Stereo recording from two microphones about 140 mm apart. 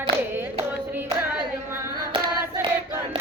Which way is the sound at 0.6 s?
15° right (ahead or behind).